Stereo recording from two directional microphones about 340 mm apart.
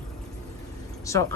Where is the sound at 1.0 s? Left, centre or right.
Centre.